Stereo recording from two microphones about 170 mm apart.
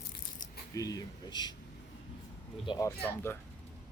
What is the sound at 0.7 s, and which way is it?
Speech, 20° left (ahead or behind).